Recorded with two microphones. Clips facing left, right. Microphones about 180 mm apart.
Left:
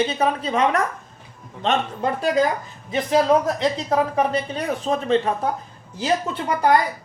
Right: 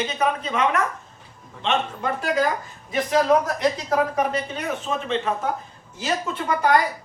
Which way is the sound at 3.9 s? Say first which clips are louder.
Left 2 dB; 30° left (ahead or behind).